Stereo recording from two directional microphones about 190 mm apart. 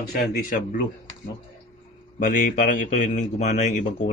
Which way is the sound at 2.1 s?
45° left (ahead or behind).